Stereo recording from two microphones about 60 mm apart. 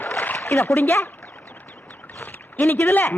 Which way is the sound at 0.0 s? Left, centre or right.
Left.